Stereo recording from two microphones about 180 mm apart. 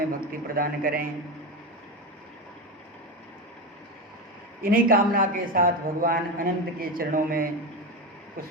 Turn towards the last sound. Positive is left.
turn(degrees=-55)  # may be behind; listen again after turning